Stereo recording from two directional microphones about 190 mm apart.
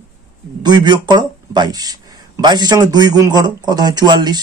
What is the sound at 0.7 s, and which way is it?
Speech, 25° right (ahead or behind).